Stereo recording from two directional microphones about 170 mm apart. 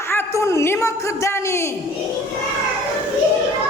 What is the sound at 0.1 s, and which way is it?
Speech, 15° left (ahead or behind).